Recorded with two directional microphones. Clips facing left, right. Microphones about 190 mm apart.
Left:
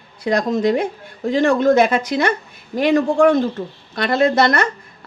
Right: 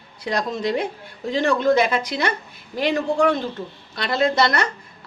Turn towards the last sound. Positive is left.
turn(degrees=50)  # may be behind; listen again after turning